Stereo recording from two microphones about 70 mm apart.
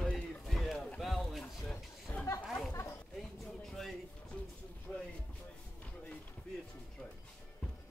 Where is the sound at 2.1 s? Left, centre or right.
Left.